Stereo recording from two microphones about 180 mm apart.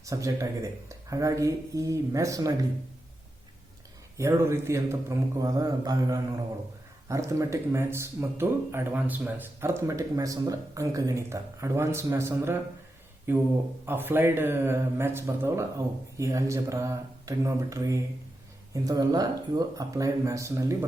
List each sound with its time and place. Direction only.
0.0 s speech: 15° right (ahead or behind)
4.2 s speech: 15° right (ahead or behind)